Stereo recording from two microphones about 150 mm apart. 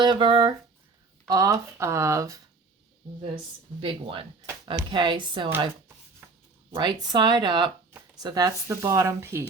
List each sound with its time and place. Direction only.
0.0 s speech: 30° right (ahead or behind)
3.8 s speech: 35° right (ahead or behind)
6.2 s writing: 10° right (ahead or behind)
6.7 s speech: 30° right (ahead or behind); by 9.5 s 15° right (ahead or behind)